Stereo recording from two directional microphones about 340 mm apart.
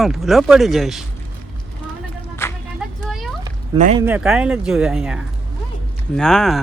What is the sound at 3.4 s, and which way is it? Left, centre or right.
Cat, centre.